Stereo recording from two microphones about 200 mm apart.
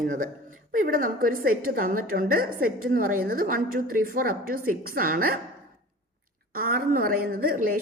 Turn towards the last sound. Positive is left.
turn(degrees=-45)  # may be behind; listen again after turning